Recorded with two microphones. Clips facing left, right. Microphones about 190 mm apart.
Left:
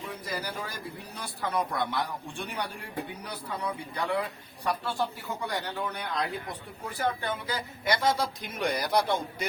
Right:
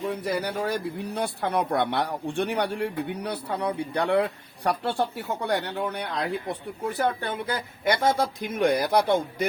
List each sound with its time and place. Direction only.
0.2 s speech: 70° right (ahead or behind)